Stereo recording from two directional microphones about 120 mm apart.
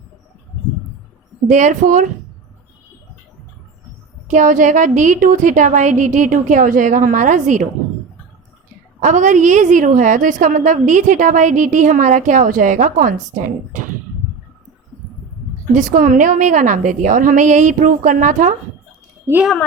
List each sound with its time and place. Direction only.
1.5 s a woman's voice: 90° right
4.3 s a woman's voice: 90° right
9.0 s a woman's voice: 90° right
15.7 s a woman's voice: 90° right